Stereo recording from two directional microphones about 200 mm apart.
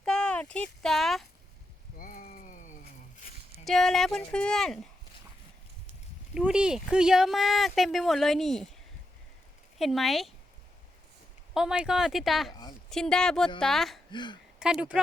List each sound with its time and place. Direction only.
0.0 s a sound: 5° left (ahead or behind)
2.0 s a sound: 45° left (ahead or behind)
3.6 s speech: centre (ahead or behind)
6.3 s speech: 5° right (ahead or behind)
9.7 s speech: centre (ahead or behind)
11.5 s speech: 5° right (ahead or behind)
14.1 s a woman's voice: 20° left (ahead or behind)
14.6 s speech: 5° right (ahead or behind)